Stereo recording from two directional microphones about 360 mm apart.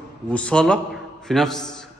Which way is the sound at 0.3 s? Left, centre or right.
Centre.